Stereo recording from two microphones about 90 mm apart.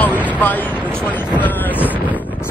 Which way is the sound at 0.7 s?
20° right (ahead or behind).